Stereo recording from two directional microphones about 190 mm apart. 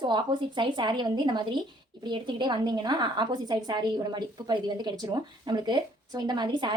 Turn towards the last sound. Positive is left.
turn(degrees=-25)  # may be behind; listen again after turning